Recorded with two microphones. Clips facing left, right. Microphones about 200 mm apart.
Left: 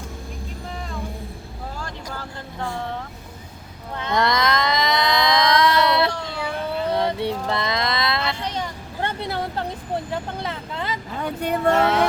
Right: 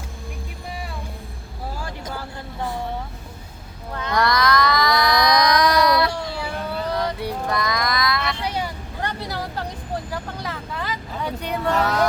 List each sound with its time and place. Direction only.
2.1 s vehicle: 10° right (ahead or behind)
3.9 s a sound: 25° left (ahead or behind)
8.4 s vehicle: 10° right (ahead or behind)
9.0 s vehicle: 25° left (ahead or behind)
11.2 s vehicle: 50° left (ahead or behind)